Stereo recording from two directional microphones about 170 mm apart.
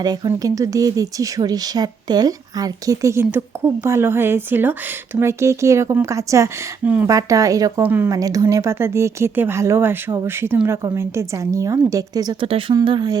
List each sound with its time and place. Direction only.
0.0 s a woman's voice: 25° right (ahead or behind)